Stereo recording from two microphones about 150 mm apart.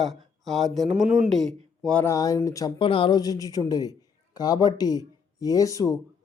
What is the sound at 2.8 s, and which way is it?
A man's voice, 35° left (ahead or behind).